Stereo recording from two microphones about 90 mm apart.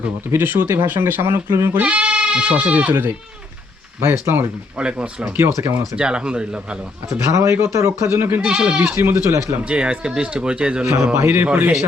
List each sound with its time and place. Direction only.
0.3 s speech: 25° right (ahead or behind)
1.8 s speech: 15° right (ahead or behind)
4.8 s speech: 10° right (ahead or behind)
7.3 s speech: 30° right (ahead or behind)
8.4 s speech: 10° right (ahead or behind)
9.0 s speech: 30° right (ahead or behind)
9.6 s speech: 10° right (ahead or behind)
11.2 s speech: 25° right (ahead or behind)